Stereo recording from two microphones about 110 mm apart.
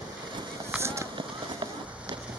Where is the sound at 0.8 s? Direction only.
25° right (ahead or behind).